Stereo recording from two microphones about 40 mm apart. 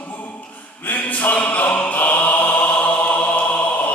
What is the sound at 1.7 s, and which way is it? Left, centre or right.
Music, left.